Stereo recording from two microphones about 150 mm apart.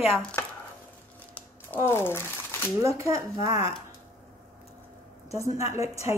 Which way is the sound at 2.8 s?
20° right (ahead or behind).